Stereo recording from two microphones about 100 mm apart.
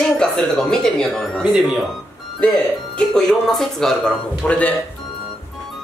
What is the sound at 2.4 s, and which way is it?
Speech, 10° left (ahead or behind).